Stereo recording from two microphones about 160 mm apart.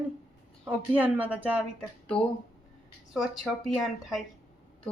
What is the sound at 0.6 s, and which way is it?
Speech, 10° right (ahead or behind).